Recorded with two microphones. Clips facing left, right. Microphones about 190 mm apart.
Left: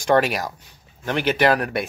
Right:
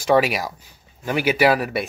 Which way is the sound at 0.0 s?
5° right (ahead or behind).